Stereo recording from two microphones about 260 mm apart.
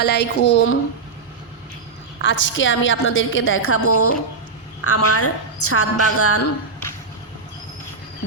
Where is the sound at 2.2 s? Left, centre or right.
Left.